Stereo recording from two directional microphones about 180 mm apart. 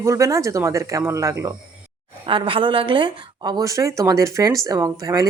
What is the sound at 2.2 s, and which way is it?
A woman's voice, 30° right (ahead or behind).